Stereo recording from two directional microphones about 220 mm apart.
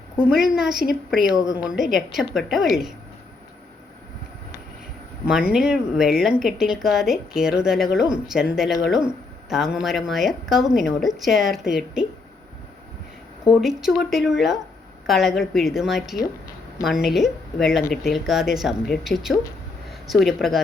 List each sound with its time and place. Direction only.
0.2 s speech: 5° right (ahead or behind)
5.2 s speech: 5° right (ahead or behind)
13.5 s speech: centre (ahead or behind)